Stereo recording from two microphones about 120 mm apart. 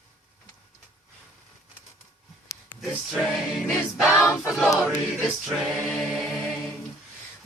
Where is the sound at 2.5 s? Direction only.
25° left (ahead or behind).